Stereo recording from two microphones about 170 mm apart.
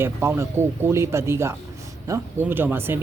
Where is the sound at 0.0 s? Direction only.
15° right (ahead or behind).